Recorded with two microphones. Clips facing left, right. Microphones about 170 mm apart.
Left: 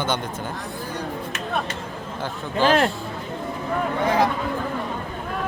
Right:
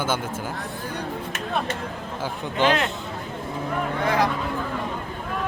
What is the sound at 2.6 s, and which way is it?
Speech, 20° right (ahead or behind).